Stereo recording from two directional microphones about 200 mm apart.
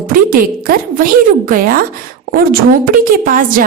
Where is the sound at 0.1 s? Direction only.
45° right (ahead or behind).